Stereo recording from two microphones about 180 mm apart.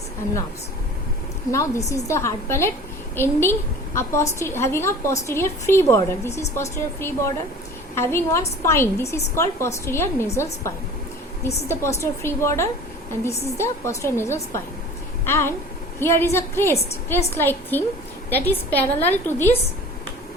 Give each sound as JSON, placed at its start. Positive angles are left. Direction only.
{"t": 1.9, "sound": "a woman's voice", "side_deg": 15}